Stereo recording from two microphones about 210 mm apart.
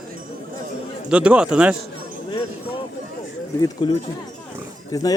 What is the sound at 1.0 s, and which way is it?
Speech, 5° right (ahead or behind).